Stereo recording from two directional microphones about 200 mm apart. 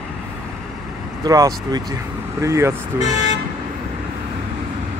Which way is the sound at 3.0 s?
35° left (ahead or behind).